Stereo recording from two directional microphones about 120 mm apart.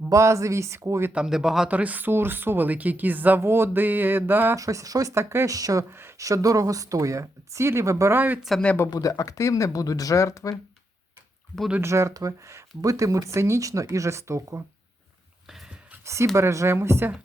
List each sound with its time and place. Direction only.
0.1 s speech: 25° right (ahead or behind)
1.1 s speech: 5° right (ahead or behind)
4.5 s speech: 30° right (ahead or behind)
8.4 s speech: centre (ahead or behind)
8.6 s speech: 20° left (ahead or behind)
8.9 s speech: 30° left (ahead or behind)
11.8 s speech: 25° right (ahead or behind)
15.4 s whispering: 5° right (ahead or behind)
15.9 s speech: 25° right (ahead or behind)